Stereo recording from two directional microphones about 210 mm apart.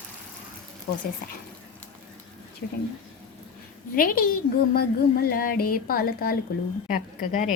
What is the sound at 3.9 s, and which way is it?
A woman's voice, 45° left (ahead or behind).